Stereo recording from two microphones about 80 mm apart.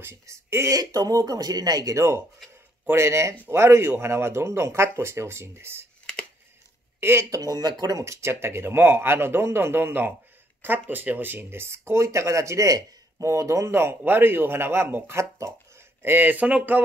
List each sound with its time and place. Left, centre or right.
0.0 s speech: right
0.7 s speech: right
7.0 s speech: right
16.0 s speech: right